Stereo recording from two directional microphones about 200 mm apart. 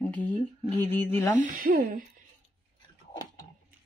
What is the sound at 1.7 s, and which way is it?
Speech, 45° right (ahead or behind).